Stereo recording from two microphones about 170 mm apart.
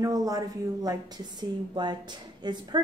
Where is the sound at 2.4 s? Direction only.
25° right (ahead or behind).